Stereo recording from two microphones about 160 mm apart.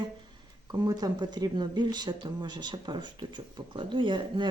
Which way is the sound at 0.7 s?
25° right (ahead or behind).